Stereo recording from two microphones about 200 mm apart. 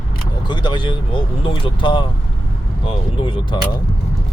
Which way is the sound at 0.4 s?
20° left (ahead or behind).